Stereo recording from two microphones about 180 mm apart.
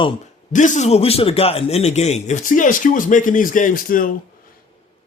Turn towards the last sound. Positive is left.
turn(degrees=50)  # may be behind; listen again after turning